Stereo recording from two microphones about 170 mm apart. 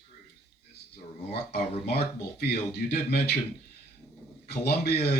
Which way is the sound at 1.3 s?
70° left (ahead or behind).